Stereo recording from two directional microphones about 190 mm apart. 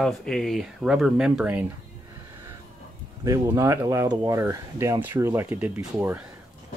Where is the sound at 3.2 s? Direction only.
20° right (ahead or behind).